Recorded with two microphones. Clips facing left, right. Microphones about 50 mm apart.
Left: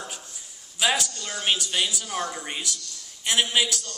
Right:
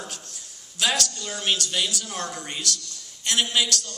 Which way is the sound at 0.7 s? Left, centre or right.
Centre.